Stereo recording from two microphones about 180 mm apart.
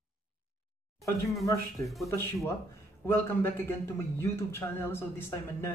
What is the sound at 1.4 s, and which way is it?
Speech, 15° left (ahead or behind).